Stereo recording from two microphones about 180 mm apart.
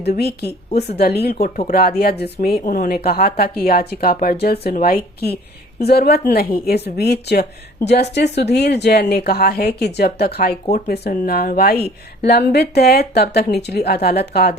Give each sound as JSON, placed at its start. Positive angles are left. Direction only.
{"t": 0.0, "sound": "speech", "side_deg": 65}
{"t": 10.7, "sound": "speech", "side_deg": 45}
{"t": 10.9, "sound": "speech", "side_deg": 60}